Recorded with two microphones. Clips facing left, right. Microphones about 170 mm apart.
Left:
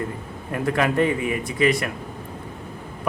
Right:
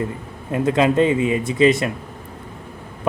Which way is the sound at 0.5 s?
20° right (ahead or behind).